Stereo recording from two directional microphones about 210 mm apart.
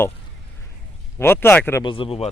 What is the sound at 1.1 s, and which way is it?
Speech, 10° left (ahead or behind).